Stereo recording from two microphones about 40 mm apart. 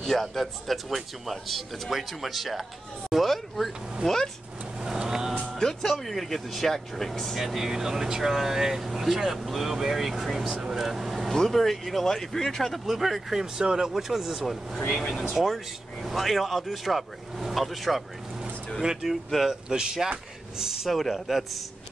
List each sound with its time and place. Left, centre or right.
0.0 s speech: centre
4.8 s vehicle: centre
5.3 s music: centre
6.0 s speech: centre
7.3 s speech: centre
11.3 s speech: centre
12.8 s speech: centre
15.0 s speech: centre
15.3 s speech: centre
18.8 s speech: centre